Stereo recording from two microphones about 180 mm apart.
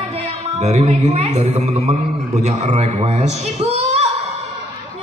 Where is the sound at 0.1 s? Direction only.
40° right (ahead or behind).